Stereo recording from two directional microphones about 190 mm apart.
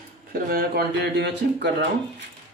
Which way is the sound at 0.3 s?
50° right (ahead or behind).